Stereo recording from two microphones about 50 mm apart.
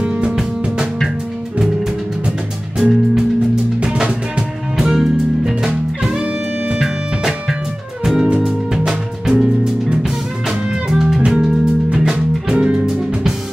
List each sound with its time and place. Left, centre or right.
0.0 s music: right
2.8 s music: centre
4.7 s music: centre
6.8 s music: centre; by 12.8 s right